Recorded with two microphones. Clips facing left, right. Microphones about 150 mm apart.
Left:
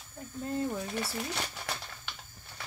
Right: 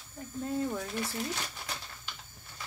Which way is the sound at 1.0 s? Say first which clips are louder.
Even; 65° left (ahead or behind).